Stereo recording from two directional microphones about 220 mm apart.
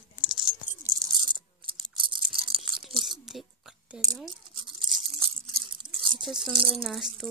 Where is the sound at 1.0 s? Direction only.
20° right (ahead or behind).